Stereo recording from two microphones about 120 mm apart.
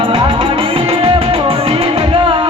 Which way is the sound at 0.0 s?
45° right (ahead or behind).